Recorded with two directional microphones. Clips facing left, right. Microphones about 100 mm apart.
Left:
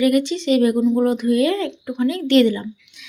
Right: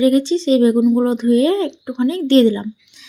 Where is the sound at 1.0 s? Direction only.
25° right (ahead or behind).